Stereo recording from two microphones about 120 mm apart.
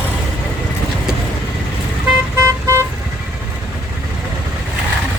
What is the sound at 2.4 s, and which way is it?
Vehicle, 25° right (ahead or behind).